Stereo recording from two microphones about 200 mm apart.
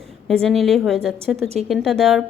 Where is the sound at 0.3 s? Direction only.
Centre (ahead or behind).